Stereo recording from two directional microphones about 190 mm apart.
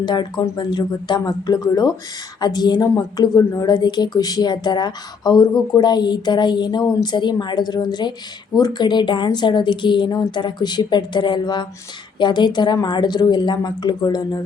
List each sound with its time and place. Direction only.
0.0 s a woman's voice: 25° left (ahead or behind)